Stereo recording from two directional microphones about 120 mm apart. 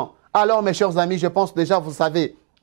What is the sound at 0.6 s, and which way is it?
Speech, 20° right (ahead or behind).